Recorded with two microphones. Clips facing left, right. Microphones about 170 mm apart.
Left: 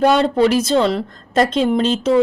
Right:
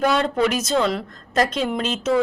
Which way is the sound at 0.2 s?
30° left (ahead or behind).